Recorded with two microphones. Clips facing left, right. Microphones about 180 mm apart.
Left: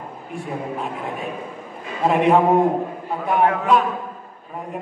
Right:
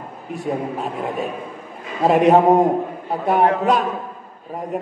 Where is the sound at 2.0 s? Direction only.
40° right (ahead or behind).